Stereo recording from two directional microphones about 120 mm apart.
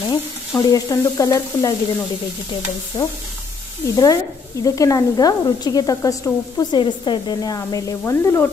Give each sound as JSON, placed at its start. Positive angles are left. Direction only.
{"t": 0.6, "sound": "speech", "side_deg": 30}
{"t": 2.9, "sound": "speech", "side_deg": 30}